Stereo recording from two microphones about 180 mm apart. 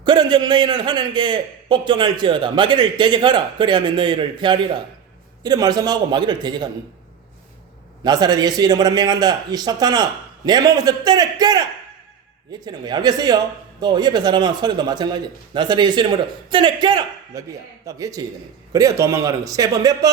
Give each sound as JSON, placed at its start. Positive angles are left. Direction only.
{"t": 0.0, "sound": "a man's voice", "side_deg": -25}
{"t": 8.0, "sound": "a man's voice", "side_deg": -25}